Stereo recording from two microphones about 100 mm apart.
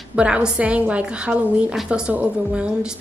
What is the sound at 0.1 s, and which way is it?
A woman's voice, 10° right (ahead or behind).